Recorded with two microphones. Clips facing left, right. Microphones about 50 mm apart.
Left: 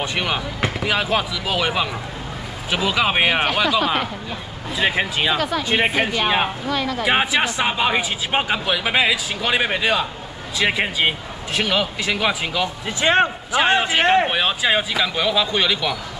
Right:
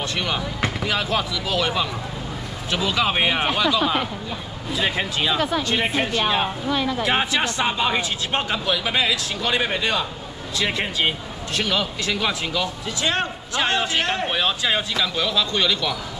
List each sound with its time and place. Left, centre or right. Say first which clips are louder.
0.0 s speech: left 2 dB; centre
0.4 s a woman's voice: left 1 dB; centre; by 6.5 s left
6.7 s speech: even; centre
7.0 s speech: left 3 dB; centre
12.8 s a woman's voice: left 11 dB; left
14.4 s speech: left 3 dB; centre